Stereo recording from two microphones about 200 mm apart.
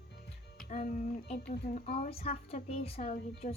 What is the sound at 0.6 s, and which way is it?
Speech, 40° left (ahead or behind).